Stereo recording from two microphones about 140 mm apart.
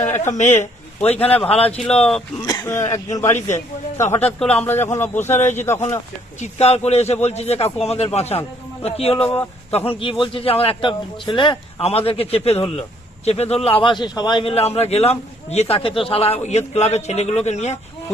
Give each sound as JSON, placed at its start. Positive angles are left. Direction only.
{"t": 0.3, "sound": "a man's voice", "side_deg": 60}
{"t": 0.6, "sound": "a man's voice", "side_deg": 45}
{"t": 2.4, "sound": "speech", "side_deg": 25}
{"t": 3.2, "sound": "a man's voice", "side_deg": 55}
{"t": 3.5, "sound": "speech", "side_deg": 20}
{"t": 4.4, "sound": "a man's voice", "side_deg": 5}
{"t": 6.4, "sound": "a man's voice", "side_deg": 50}